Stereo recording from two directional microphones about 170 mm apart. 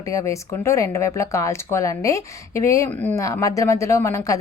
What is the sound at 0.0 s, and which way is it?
Speech, 20° left (ahead or behind).